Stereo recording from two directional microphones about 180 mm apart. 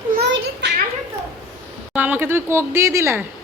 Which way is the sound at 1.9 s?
10° right (ahead or behind).